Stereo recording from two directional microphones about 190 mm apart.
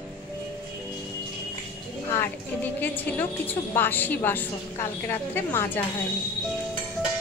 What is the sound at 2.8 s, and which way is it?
A woman's voice, 10° left (ahead or behind).